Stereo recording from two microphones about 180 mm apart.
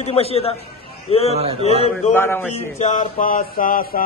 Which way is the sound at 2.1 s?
10° left (ahead or behind).